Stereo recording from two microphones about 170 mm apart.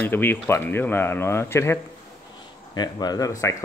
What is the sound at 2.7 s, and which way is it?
Speech, 25° left (ahead or behind).